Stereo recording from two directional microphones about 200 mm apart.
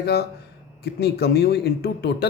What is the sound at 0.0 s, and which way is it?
Speech, 55° left (ahead or behind).